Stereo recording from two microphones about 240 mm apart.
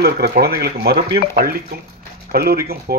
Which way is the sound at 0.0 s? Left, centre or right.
Right.